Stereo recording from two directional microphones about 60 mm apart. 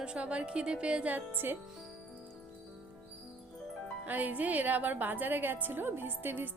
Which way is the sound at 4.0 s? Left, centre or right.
Right.